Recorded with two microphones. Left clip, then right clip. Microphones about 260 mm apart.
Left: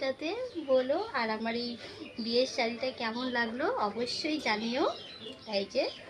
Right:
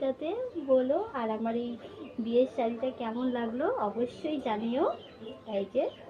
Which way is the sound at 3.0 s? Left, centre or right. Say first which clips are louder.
Left 1 dB; left.